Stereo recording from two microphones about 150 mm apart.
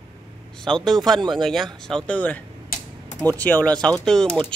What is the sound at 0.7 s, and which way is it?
Speech, 5° left (ahead or behind).